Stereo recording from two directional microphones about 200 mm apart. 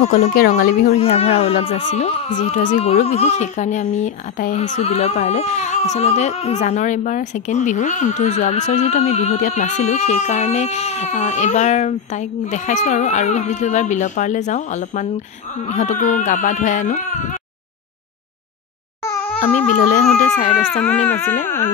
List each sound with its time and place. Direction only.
0.0 s speech: 35° left (ahead or behind)
0.9 s speech: 30° left (ahead or behind)
19.7 s speech: 40° left (ahead or behind)
21.1 s speech: 10° left (ahead or behind)